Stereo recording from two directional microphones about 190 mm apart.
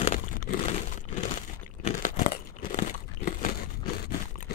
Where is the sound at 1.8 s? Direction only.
35° left (ahead or behind).